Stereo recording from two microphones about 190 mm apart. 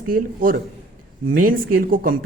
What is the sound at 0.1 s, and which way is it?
Speech, 50° right (ahead or behind).